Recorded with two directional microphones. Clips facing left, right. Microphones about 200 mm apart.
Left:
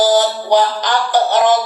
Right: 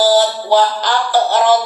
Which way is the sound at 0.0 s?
20° left (ahead or behind).